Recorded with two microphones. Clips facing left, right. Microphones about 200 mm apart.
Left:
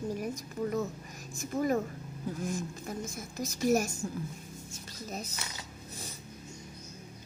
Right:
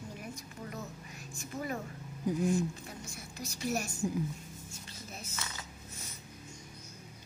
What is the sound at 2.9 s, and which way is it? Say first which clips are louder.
Speech: left 8 dB; 45° left (ahead or behind).